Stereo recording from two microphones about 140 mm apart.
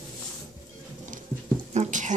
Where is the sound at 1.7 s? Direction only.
60° right (ahead or behind).